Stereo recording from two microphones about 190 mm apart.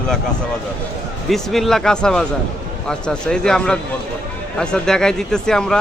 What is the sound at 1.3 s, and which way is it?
Speech, centre (ahead or behind).